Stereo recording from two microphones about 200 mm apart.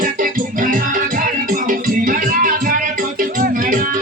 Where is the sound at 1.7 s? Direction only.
45° right (ahead or behind).